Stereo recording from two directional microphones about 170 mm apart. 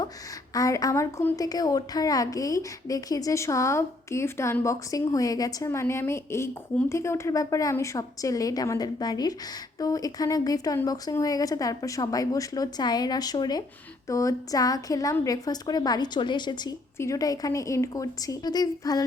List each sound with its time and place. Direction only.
0.5 s a woman's voice: 20° left (ahead or behind)